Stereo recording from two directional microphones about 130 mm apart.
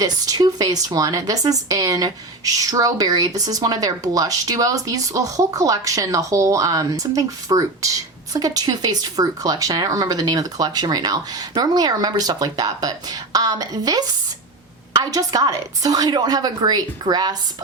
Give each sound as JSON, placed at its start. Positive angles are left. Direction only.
{"t": 0.0, "sound": "a woman's voice", "side_deg": -30}